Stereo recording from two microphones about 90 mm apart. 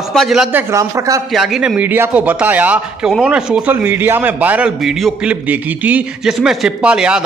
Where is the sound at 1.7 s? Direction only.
20° right (ahead or behind).